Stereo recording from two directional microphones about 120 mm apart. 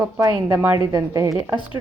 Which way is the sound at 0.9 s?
30° right (ahead or behind).